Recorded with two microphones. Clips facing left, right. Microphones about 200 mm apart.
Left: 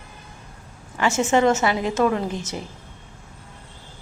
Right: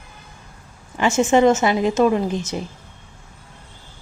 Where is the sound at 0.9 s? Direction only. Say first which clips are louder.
Right 3 dB; 20° right (ahead or behind).